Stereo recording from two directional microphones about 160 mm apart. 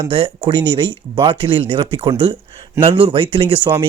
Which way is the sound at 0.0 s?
35° right (ahead or behind).